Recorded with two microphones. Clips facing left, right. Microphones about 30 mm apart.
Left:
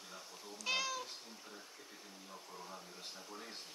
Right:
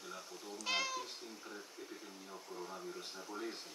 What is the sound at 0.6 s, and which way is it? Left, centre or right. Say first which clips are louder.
Speech: even; centre.